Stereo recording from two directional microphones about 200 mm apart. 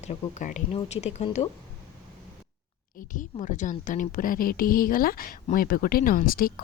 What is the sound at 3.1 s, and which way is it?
A woman's voice, 40° left (ahead or behind).